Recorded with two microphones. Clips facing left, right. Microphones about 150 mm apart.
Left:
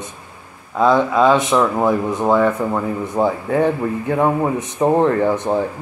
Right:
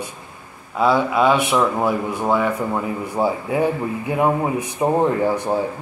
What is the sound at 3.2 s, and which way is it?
Speech, 10° right (ahead or behind).